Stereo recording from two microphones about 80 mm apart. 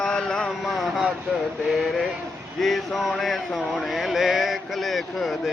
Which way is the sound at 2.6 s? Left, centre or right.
Centre.